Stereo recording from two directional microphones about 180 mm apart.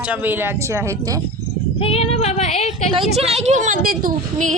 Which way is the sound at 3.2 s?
35° right (ahead or behind).